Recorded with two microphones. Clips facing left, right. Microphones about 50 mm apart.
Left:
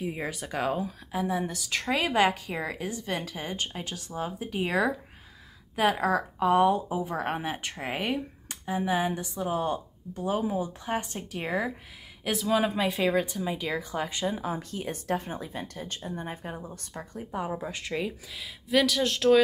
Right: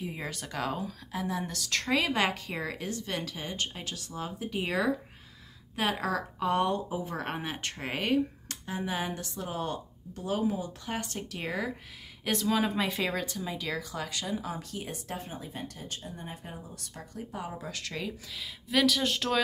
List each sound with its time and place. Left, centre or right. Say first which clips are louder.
0.0 s a woman's voice: left 4 dB; centre
12.3 s speech: left 2 dB; centre
13.1 s speech: left 6 dB; centre
17.6 s a woman's voice: left 5 dB; left
18.3 s speech: left 3 dB; centre